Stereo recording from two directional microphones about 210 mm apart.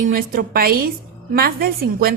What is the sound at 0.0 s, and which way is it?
A woman's voice, 40° right (ahead or behind).